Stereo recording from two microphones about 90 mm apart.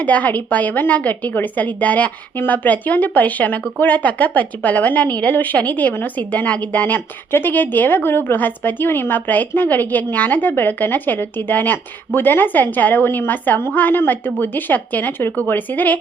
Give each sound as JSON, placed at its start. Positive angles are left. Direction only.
{"t": 0.0, "sound": "a woman's voice", "side_deg": 15}